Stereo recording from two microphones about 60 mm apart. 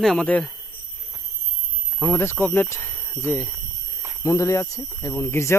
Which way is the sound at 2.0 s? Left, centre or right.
Left.